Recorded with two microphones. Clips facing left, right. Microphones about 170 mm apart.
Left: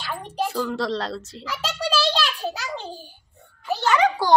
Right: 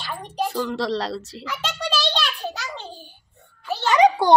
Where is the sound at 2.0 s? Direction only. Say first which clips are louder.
Left 2 dB; 5° left (ahead or behind).